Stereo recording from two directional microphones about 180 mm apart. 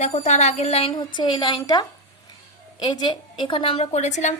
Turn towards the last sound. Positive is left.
turn(degrees=40)  # may be behind; listen again after turning